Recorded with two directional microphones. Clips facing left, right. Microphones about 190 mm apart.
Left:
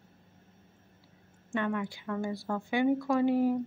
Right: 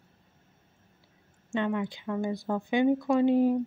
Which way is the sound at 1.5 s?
20° right (ahead or behind).